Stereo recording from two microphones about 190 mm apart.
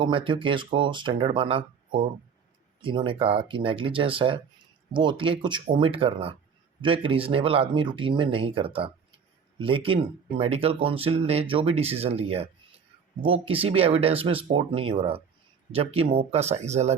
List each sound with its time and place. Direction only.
0.0 s speech: 25° right (ahead or behind)